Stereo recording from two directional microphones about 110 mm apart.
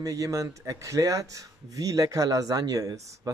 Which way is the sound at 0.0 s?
30° right (ahead or behind).